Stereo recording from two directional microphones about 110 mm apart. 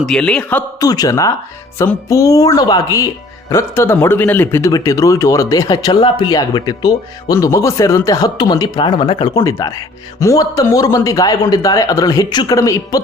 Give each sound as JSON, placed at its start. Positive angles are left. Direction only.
{"t": 0.0, "sound": "a man's voice", "side_deg": 5}
{"t": 0.8, "sound": "speech", "side_deg": 35}
{"t": 3.5, "sound": "speech", "side_deg": 25}
{"t": 4.6, "sound": "speech", "side_deg": 30}
{"t": 9.3, "sound": "speech", "side_deg": 30}